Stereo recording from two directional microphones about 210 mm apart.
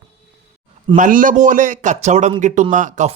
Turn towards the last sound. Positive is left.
turn(degrees=-35)  # may be behind; listen again after turning